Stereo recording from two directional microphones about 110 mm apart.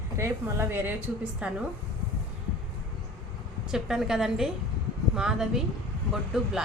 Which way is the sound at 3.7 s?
5° right (ahead or behind).